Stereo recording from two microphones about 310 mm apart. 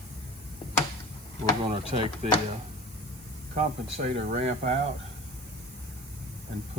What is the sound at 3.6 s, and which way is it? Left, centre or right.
Speech, right.